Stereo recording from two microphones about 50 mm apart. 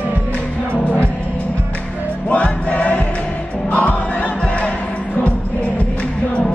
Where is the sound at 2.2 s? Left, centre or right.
Left.